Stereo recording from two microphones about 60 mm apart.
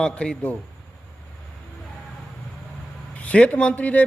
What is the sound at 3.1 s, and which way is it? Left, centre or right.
Speech, left.